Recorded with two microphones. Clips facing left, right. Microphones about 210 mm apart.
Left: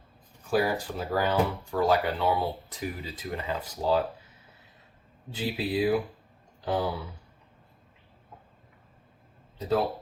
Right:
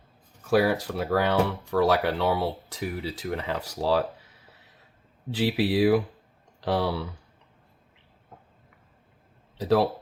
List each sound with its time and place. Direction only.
0.5 s speech: 75° right (ahead or behind)
5.3 s speech: 75° right (ahead or behind)
9.6 s speech: 75° right (ahead or behind)